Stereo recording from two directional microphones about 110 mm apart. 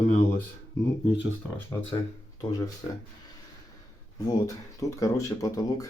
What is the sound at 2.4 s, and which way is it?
Speech, 35° left (ahead or behind).